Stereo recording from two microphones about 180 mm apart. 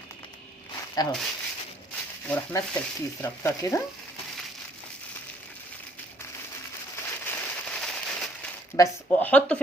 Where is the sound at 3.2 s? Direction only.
15° left (ahead or behind).